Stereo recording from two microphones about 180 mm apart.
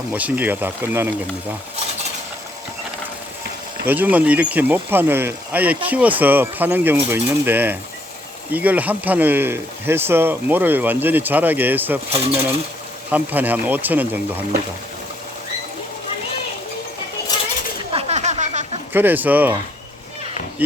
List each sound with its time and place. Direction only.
0.1 s speech: 10° right (ahead or behind)
3.8 s speech: 10° right (ahead or behind)
17.9 s a sound: 40° right (ahead or behind)
18.9 s speech: 10° right (ahead or behind)
20.6 s speech: 10° right (ahead or behind)